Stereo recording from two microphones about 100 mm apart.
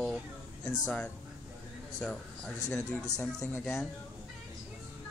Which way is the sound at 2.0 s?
5° left (ahead or behind).